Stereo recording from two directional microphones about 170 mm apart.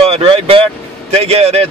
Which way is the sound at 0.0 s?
35° right (ahead or behind).